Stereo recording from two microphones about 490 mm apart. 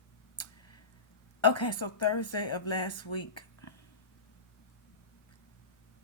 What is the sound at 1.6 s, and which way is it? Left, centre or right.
Speech, left.